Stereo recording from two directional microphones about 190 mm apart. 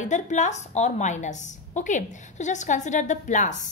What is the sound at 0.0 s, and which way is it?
A woman's voice, 40° left (ahead or behind).